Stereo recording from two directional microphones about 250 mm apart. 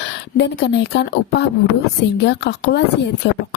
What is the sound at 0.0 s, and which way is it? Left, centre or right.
Speech, left.